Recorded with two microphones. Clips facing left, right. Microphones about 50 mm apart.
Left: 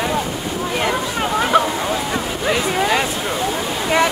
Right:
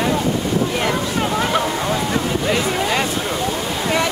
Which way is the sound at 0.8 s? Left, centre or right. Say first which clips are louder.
Even; centre.